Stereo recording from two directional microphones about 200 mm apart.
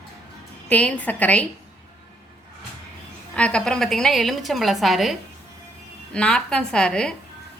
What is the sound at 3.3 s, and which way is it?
A woman's voice, 5° left (ahead or behind).